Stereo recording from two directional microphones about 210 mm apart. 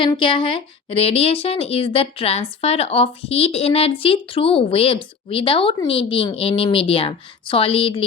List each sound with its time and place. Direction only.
0.0 s a woman's voice: 25° left (ahead or behind)